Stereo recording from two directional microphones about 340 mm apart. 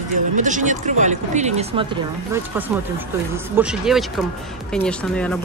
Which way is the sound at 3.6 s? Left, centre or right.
Centre.